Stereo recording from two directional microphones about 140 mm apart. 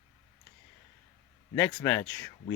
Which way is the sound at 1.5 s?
15° left (ahead or behind).